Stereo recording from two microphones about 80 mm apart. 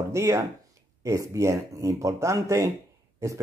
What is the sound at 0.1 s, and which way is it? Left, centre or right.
Speech, right.